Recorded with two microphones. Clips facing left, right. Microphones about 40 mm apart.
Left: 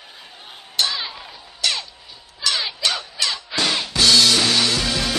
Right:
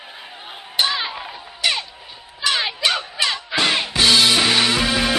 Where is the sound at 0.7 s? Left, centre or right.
Right.